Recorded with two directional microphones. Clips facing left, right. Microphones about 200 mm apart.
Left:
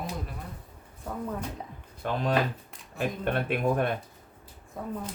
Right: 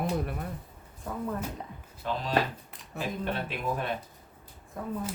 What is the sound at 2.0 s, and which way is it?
Speech, 55° left (ahead or behind).